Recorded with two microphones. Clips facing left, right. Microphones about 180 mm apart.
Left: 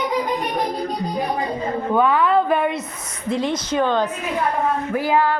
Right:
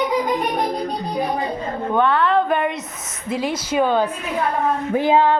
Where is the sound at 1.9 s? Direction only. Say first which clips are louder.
Even; 5° left (ahead or behind).